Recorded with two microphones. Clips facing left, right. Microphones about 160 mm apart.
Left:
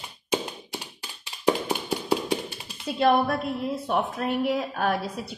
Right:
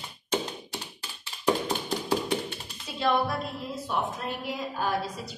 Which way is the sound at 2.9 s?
55° left (ahead or behind).